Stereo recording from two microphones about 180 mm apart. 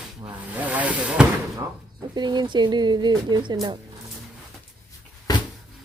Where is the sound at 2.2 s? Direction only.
25° right (ahead or behind).